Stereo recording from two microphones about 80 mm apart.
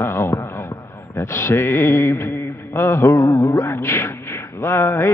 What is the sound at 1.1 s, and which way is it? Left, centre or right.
Mantra, left.